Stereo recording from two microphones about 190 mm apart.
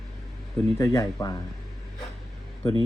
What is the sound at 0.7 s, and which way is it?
Speech, 15° left (ahead or behind).